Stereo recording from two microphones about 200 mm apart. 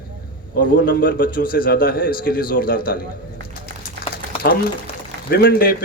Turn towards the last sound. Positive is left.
turn(degrees=50)  # may be behind; listen again after turning